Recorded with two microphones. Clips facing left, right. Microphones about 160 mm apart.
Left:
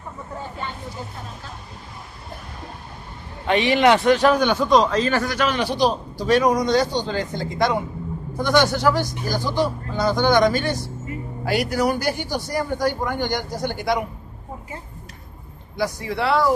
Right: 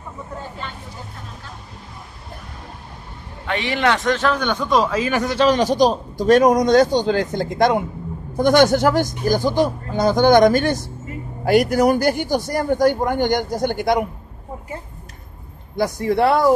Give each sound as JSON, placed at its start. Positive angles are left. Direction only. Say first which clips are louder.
{"t": 3.4, "sound": "a man's voice", "louder": "left 4 dB", "side_deg": 20}
{"t": 4.6, "sound": "speech", "louder": "right 1 dB", "side_deg": -5}
{"t": 5.4, "sound": "a man's voice", "louder": "right 7 dB", "side_deg": -40}
{"t": 15.7, "sound": "a man's voice", "louder": "right 6 dB", "side_deg": -50}